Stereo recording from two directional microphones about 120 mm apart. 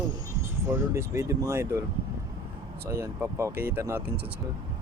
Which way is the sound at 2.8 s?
25° right (ahead or behind).